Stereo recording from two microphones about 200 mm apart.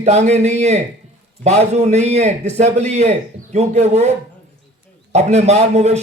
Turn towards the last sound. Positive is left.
turn(degrees=-35)  # may be behind; listen again after turning